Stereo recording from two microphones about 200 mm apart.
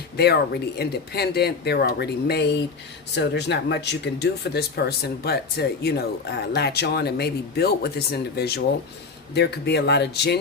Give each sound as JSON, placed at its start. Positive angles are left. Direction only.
{"t": 0.2, "sound": "speech", "side_deg": 55}